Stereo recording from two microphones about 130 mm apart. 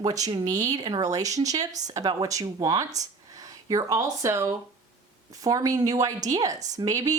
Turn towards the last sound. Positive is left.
turn(degrees=-25)  # may be behind; listen again after turning